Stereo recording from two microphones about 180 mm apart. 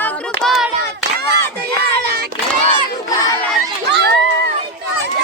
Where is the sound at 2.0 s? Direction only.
60° right (ahead or behind).